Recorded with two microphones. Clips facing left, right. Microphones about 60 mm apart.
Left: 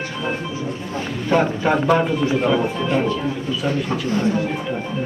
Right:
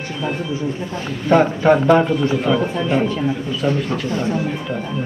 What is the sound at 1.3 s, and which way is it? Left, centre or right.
A man's voice, centre.